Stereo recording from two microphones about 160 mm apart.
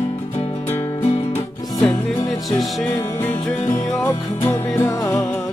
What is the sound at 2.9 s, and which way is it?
Music, 15° left (ahead or behind).